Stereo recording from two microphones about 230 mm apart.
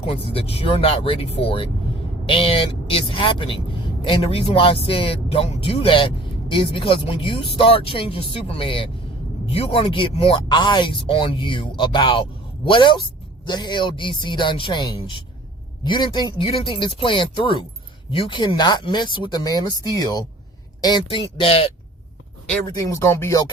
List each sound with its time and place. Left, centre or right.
0.0 s speech: left
22.4 s speech: centre